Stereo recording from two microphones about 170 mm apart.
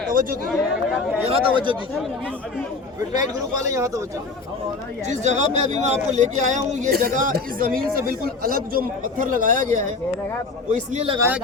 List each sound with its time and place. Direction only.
0.1 s chatter: 55° right (ahead or behind)
1.2 s a man's voice: 30° right (ahead or behind)
3.1 s speech: 20° right (ahead or behind)
5.0 s a man's voice: 45° right (ahead or behind)